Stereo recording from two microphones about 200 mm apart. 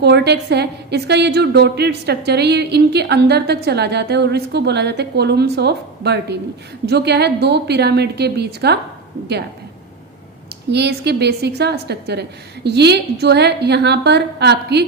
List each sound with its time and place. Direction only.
0.0 s a woman's voice: 55° right (ahead or behind)
10.7 s a woman's voice: 55° right (ahead or behind)